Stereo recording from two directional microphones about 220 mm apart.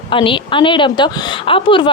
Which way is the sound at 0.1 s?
25° left (ahead or behind).